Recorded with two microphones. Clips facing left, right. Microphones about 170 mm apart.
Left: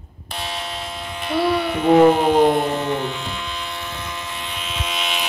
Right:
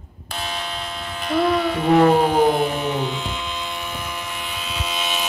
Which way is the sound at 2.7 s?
15° right (ahead or behind).